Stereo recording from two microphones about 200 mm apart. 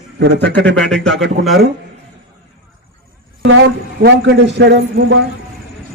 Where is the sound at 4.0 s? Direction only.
60° right (ahead or behind).